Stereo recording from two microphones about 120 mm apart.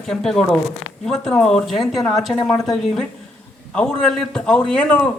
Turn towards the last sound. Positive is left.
turn(degrees=10)  # may be behind; listen again after turning